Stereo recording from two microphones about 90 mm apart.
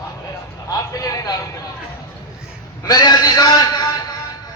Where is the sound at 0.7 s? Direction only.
40° left (ahead or behind).